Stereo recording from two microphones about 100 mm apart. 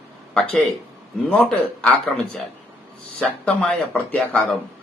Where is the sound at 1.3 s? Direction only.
10° left (ahead or behind).